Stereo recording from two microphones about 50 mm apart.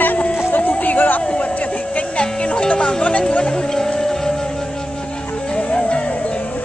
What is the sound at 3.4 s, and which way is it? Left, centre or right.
Music, centre.